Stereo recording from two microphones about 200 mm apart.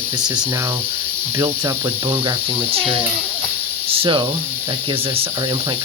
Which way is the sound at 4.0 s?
25° right (ahead or behind).